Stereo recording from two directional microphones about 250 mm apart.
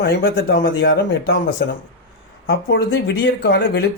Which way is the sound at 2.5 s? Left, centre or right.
Left.